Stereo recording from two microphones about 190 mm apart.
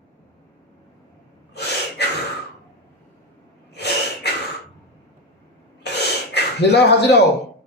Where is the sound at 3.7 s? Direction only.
60° left (ahead or behind).